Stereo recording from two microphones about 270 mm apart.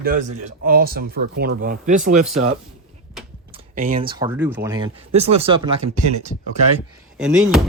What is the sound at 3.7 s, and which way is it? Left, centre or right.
Speech, right.